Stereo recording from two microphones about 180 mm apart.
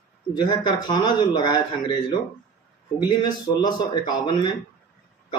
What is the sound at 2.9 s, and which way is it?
A man's voice, 25° left (ahead or behind).